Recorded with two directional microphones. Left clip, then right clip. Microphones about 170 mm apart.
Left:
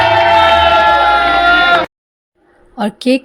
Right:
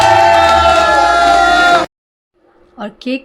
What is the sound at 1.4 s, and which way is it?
Bleat, 5° left (ahead or behind).